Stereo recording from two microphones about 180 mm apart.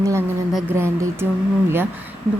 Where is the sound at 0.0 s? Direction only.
15° right (ahead or behind).